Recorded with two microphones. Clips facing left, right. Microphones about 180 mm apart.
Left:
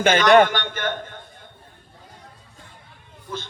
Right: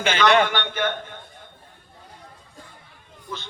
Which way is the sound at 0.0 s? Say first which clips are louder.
Left 4 dB; 50° left (ahead or behind).